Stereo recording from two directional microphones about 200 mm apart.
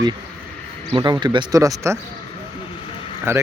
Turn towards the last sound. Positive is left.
turn(degrees=-10)  # may be behind; listen again after turning